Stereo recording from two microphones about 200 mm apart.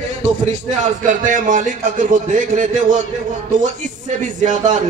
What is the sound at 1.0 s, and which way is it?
A man's voice, 40° right (ahead or behind).